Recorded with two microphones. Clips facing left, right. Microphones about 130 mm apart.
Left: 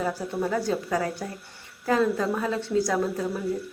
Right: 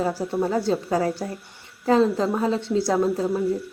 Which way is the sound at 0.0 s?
30° right (ahead or behind).